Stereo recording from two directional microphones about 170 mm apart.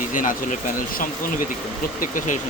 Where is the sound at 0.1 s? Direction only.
50° left (ahead or behind).